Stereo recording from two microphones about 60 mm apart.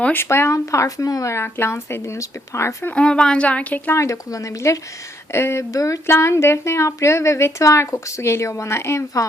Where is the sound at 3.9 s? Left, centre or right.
Left.